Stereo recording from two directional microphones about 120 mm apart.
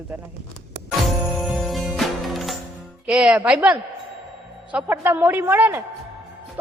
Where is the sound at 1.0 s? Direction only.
Centre (ahead or behind).